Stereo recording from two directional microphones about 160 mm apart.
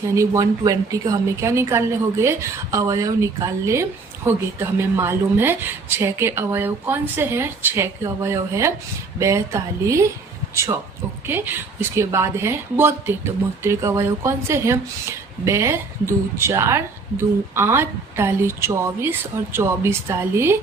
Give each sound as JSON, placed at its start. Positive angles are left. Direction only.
{"t": 0.1, "sound": "a woman's voice", "side_deg": -20}